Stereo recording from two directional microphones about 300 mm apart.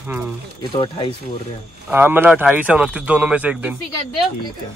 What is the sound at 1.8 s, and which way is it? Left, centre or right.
Speech, centre.